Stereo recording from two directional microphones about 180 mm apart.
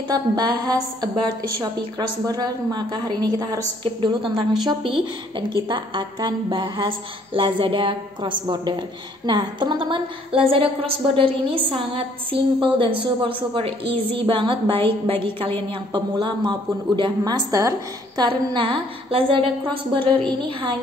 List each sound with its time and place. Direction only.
0.1 s a woman's voice: 25° right (ahead or behind)